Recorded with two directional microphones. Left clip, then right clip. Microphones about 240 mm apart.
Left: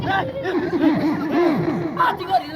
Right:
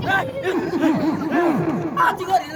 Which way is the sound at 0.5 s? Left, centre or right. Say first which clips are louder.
Left 1 dB; right.